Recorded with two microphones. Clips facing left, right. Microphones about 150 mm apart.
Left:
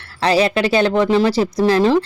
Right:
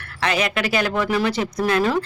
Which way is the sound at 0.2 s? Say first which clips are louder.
Left 7 dB; 30° left (ahead or behind).